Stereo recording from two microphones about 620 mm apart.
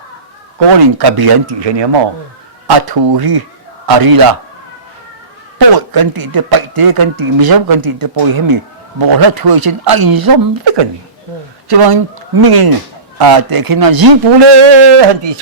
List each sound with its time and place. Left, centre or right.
0.8 s a man's voice: right
5.5 s a man's voice: right